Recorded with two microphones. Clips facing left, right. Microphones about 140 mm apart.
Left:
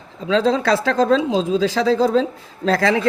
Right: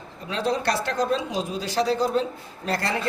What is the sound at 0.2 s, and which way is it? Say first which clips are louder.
Speech: left 8 dB; 90° left.